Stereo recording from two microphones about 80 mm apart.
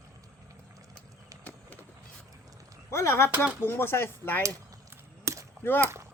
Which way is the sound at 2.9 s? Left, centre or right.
Left.